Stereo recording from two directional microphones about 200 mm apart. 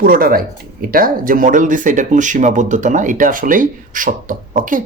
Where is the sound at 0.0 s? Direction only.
45° right (ahead or behind).